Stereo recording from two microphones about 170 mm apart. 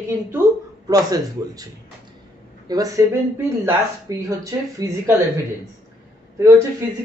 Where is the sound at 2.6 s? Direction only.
20° right (ahead or behind).